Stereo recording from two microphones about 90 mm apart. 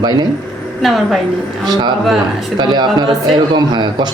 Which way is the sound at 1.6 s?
55° right (ahead or behind).